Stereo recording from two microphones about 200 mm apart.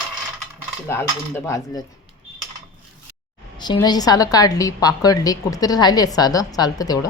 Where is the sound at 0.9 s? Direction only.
10° left (ahead or behind).